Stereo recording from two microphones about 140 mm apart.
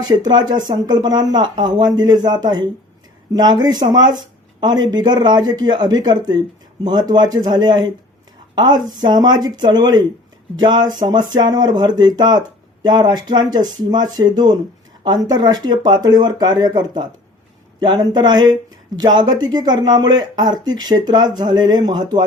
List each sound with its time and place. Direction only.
0.0 s speech: 30° right (ahead or behind)